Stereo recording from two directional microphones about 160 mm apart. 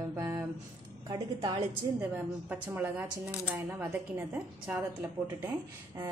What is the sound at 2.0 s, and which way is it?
A woman's voice, 10° right (ahead or behind).